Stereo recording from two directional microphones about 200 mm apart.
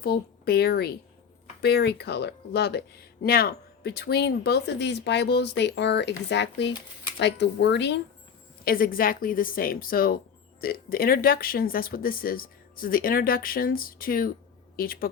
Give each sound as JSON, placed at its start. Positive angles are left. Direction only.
{"t": 0.0, "sound": "speech", "side_deg": 50}
{"t": 8.6, "sound": "speech", "side_deg": 45}